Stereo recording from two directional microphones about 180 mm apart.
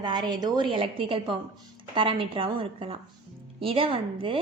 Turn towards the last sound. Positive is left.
turn(degrees=-30)  # may be behind; listen again after turning